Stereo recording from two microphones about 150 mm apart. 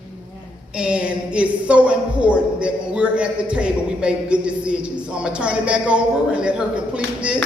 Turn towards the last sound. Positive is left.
turn(degrees=-5)  # may be behind; listen again after turning